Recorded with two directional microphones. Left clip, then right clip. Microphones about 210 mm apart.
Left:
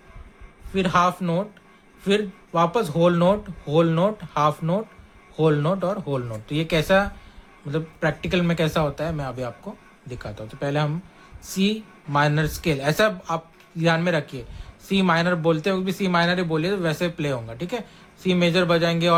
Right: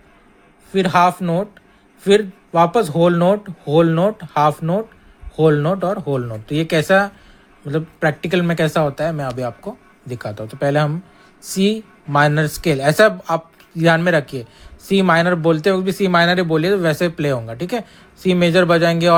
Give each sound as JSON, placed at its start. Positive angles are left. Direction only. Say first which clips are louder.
{"t": 0.7, "sound": "speech", "louder": "right 6 dB", "side_deg": -25}